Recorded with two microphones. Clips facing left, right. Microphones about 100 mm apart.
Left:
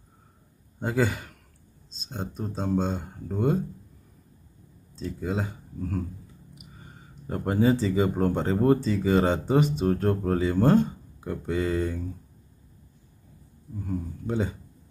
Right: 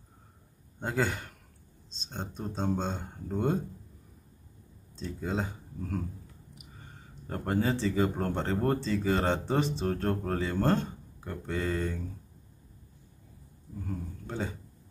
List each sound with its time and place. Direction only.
0.7 s a man's voice: centre (ahead or behind)
4.9 s speech: centre (ahead or behind)
13.8 s speech: 10° left (ahead or behind)